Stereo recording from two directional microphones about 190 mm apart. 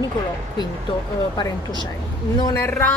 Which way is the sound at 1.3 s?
20° left (ahead or behind).